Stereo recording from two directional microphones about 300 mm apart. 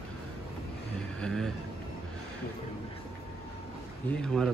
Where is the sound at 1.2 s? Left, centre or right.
Centre.